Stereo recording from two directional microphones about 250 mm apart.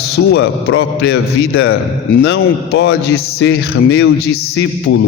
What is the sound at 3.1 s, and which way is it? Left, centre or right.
Speech, left.